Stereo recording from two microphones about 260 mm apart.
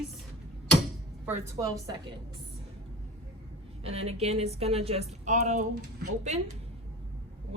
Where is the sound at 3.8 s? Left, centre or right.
Right.